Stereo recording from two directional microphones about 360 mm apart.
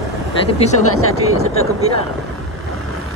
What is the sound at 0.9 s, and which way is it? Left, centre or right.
Speech, left.